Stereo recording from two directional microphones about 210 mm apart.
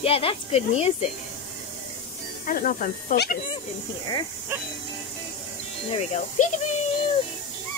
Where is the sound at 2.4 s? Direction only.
40° left (ahead or behind).